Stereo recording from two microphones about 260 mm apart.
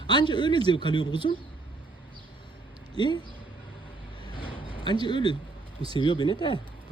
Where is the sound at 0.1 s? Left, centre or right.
Centre.